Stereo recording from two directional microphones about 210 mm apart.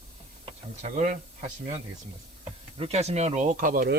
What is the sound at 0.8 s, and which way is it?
Speech, 40° right (ahead or behind).